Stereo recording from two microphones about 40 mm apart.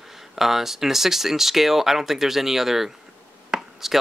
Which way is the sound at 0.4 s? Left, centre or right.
Centre.